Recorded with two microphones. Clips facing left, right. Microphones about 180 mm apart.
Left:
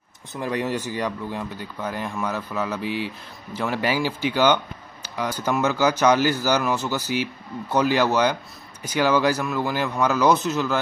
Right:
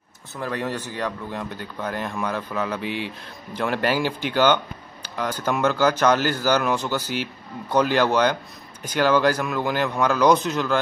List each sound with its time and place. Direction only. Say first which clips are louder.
0.3 s speech: left 2 dB; 15° left (ahead or behind)